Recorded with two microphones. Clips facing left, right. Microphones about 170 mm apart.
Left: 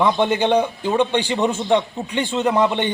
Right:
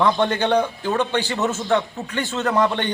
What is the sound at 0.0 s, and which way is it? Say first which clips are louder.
A man's voice: left 2 dB; 10° left (ahead or behind).